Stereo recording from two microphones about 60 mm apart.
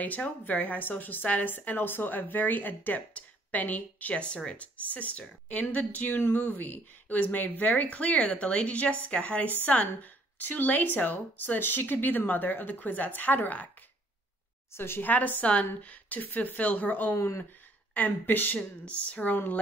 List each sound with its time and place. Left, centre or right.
0.0 s a woman's voice: left
14.7 s a woman's voice: left
17.1 s speech: left
17.9 s a woman's voice: left
19.3 s a woman's voice: left